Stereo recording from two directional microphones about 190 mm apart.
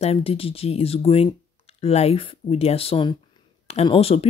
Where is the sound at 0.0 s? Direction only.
30° left (ahead or behind).